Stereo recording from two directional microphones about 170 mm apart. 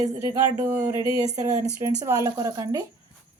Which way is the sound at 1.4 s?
20° right (ahead or behind).